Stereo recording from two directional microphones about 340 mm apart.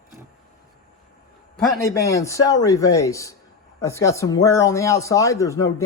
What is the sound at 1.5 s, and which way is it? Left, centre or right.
Speech, centre.